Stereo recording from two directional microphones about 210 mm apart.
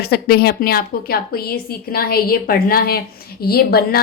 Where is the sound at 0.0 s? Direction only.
50° left (ahead or behind).